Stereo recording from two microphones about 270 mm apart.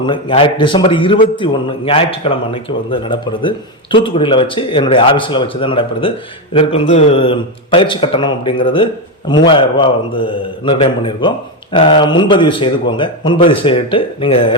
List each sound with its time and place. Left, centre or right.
0.0 s a man's voice: centre